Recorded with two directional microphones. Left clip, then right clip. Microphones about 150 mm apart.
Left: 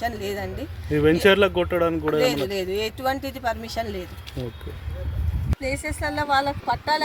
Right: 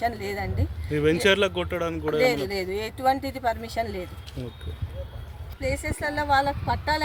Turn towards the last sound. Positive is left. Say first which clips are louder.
# left 2 dB
turn(degrees=0)  # may be behind; listen again after turning